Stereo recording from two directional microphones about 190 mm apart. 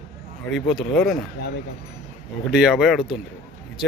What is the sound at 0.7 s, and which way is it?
Speech, 5° left (ahead or behind).